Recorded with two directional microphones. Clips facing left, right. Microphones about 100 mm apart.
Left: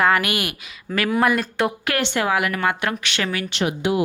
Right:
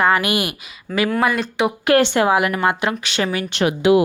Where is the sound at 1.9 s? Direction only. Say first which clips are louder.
Right 10 dB; 35° right (ahead or behind).